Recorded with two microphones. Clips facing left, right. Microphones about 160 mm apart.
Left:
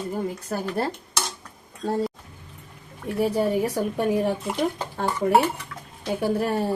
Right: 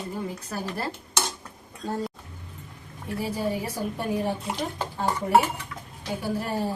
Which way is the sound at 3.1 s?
65° left (ahead or behind).